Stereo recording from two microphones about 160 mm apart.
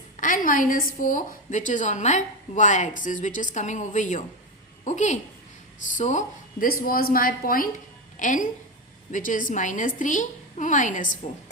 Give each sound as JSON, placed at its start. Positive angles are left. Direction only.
{"t": 0.2, "sound": "a woman's voice", "side_deg": 55}